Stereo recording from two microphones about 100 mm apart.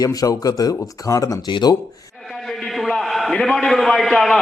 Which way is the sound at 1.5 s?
45° left (ahead or behind).